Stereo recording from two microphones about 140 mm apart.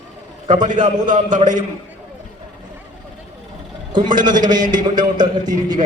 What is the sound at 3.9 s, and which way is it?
A man's voice, 30° right (ahead or behind).